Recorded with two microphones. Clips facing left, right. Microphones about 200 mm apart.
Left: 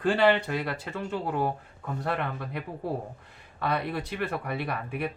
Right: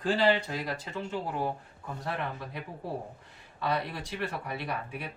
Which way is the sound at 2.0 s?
60° left (ahead or behind).